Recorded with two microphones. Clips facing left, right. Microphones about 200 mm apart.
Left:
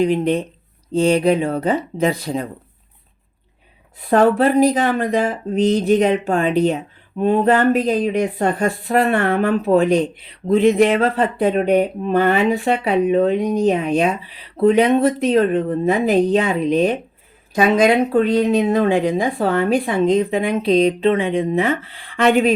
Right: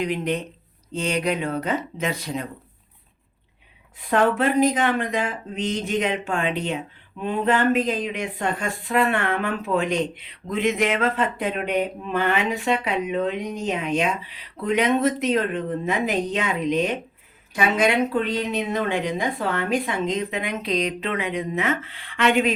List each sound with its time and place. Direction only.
0.0 s speech: 30° left (ahead or behind)
4.1 s speech: 35° left (ahead or behind)